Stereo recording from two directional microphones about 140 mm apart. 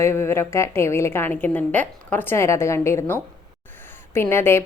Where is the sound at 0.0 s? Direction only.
20° left (ahead or behind).